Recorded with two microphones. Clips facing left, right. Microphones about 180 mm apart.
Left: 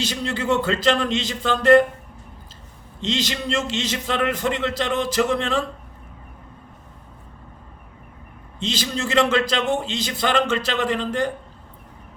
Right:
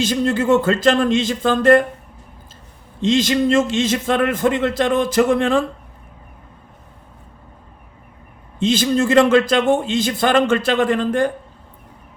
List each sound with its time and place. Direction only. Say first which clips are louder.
0.0 s a man's voice: right 8 dB; 50° right (ahead or behind)
3.0 s a man's voice: right 9 dB; 50° right (ahead or behind)
8.5 s a man's voice: right 10 dB; 50° right (ahead or behind)